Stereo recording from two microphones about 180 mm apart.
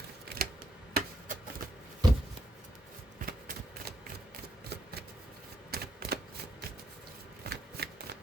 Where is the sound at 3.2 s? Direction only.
50° right (ahead or behind).